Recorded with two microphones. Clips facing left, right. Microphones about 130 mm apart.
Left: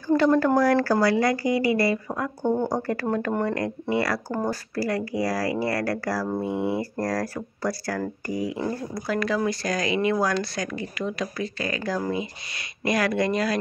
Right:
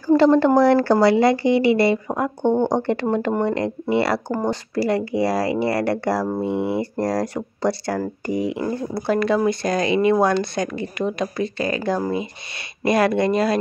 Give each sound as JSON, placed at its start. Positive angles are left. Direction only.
{"t": 0.0, "sound": "speech", "side_deg": -30}